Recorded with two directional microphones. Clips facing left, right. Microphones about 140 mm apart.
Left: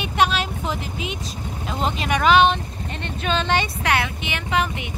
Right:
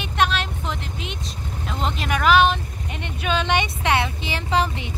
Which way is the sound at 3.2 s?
10° right (ahead or behind).